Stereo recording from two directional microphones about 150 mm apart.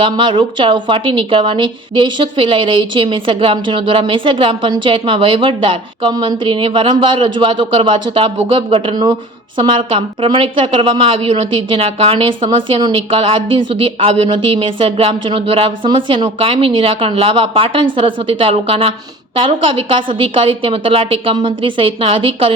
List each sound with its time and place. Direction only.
0.0 s a woman's voice: 35° right (ahead or behind)